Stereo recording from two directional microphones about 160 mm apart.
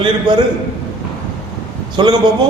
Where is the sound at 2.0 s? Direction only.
25° right (ahead or behind).